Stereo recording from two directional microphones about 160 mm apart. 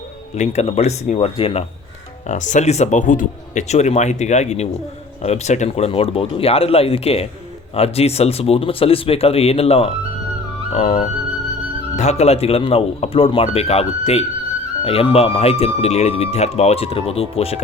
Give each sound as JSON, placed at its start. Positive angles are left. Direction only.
{"t": 0.3, "sound": "speech", "side_deg": 45}
{"t": 2.2, "sound": "speech", "side_deg": 50}